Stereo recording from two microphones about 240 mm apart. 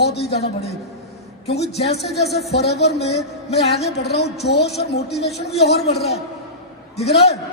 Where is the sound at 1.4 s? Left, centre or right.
Left.